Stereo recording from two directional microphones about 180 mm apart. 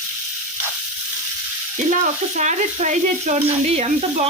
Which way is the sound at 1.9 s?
40° right (ahead or behind).